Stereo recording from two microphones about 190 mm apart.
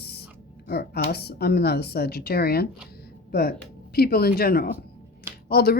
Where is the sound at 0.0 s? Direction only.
55° left (ahead or behind).